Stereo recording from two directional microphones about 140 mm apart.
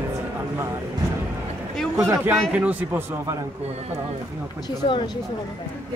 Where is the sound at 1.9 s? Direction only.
20° right (ahead or behind).